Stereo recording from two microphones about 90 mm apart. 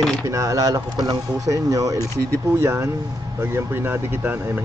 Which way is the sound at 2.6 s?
30° right (ahead or behind).